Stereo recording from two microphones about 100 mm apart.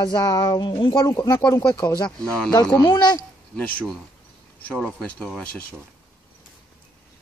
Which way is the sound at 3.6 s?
15° left (ahead or behind).